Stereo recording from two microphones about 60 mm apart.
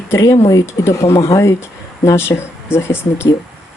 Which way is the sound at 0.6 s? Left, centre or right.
Left.